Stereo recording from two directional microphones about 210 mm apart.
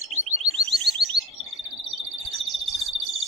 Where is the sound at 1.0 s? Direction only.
Centre (ahead or behind).